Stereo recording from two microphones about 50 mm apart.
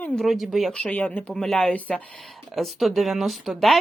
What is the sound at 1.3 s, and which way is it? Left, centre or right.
Speech, centre.